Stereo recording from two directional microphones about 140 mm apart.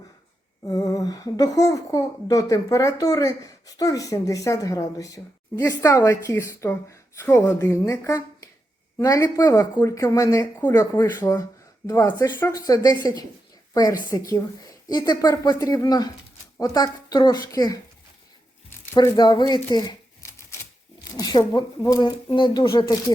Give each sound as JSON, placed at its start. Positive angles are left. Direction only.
{"t": 0.7, "sound": "a child's voice", "side_deg": 25}
{"t": 18.9, "sound": "speech", "side_deg": 30}